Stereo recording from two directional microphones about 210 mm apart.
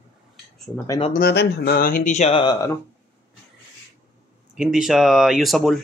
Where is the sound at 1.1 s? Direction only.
50° left (ahead or behind); by 2.7 s 25° left (ahead or behind).